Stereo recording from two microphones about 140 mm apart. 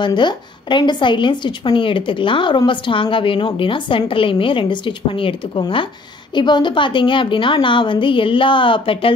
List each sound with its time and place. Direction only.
0.0 s a woman's voice: 35° left (ahead or behind)